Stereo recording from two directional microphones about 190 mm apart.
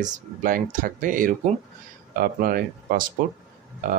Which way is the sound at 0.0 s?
45° right (ahead or behind).